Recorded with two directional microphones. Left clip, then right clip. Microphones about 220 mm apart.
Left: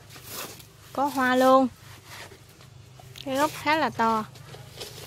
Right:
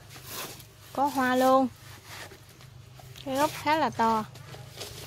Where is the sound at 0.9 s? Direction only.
Centre (ahead or behind).